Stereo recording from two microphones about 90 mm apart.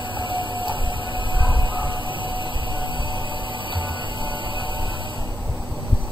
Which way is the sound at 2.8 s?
65° left (ahead or behind).